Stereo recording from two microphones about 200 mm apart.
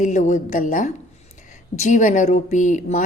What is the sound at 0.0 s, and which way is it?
A woman's voice, 40° left (ahead or behind).